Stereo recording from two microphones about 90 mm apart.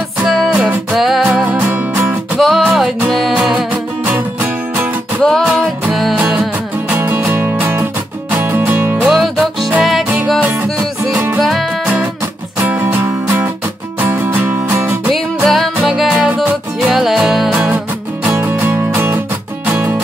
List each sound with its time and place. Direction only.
0.3 s music: centre (ahead or behind)
1.5 s music: 20° right (ahead or behind)
2.3 s music: centre (ahead or behind)
3.7 s music: 20° right (ahead or behind)
5.2 s music: 5° left (ahead or behind)
6.9 s music: 20° right (ahead or behind)
9.0 s music: centre (ahead or behind)
12.6 s music: 25° right (ahead or behind)
15.0 s music: centre (ahead or behind)
18.3 s music: 25° right (ahead or behind)